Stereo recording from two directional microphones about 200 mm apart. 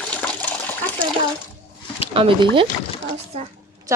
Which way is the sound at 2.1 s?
25° right (ahead or behind).